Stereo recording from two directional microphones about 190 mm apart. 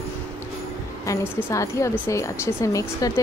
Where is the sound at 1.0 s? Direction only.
15° left (ahead or behind).